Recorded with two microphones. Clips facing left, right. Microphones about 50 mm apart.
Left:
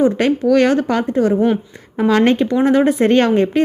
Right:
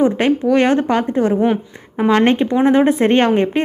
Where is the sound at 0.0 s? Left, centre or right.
Right.